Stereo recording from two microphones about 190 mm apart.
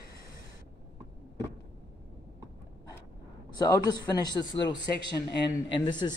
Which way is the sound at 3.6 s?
20° left (ahead or behind).